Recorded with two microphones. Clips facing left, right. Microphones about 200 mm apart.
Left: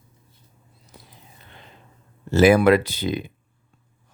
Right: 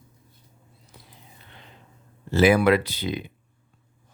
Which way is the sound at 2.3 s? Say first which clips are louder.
Left 3 dB; 45° left (ahead or behind).